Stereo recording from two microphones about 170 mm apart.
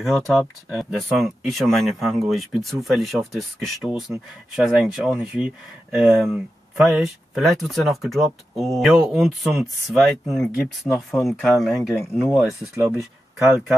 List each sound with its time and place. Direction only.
0.3 s speech: centre (ahead or behind)
12.7 s speech: 15° right (ahead or behind)